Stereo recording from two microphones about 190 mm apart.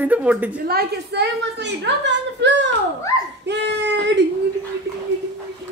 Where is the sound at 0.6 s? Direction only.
60° right (ahead or behind).